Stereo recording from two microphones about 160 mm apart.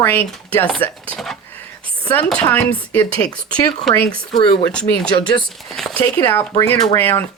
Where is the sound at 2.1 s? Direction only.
10° left (ahead or behind).